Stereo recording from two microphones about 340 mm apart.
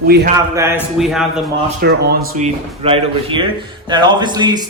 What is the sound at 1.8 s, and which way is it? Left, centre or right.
A man's voice, right.